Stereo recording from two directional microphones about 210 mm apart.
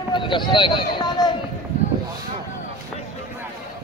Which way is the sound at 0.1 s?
20° left (ahead or behind).